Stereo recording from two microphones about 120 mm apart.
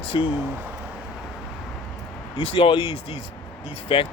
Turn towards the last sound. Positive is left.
turn(degrees=50)  # may be behind; listen again after turning